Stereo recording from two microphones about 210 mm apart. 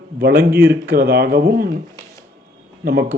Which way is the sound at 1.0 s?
45° right (ahead or behind).